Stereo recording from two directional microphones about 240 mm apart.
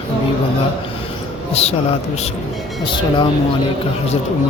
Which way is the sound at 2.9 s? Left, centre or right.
Centre.